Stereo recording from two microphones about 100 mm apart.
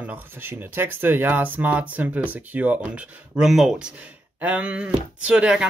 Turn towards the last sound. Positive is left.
turn(degrees=-10)  # may be behind; listen again after turning